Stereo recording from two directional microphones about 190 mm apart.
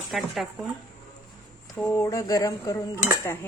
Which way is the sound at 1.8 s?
15° left (ahead or behind).